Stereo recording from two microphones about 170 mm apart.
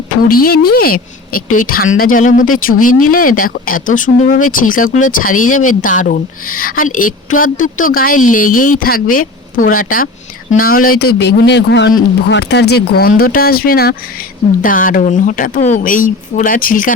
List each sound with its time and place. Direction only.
0.3 s a woman's voice: 60° left (ahead or behind)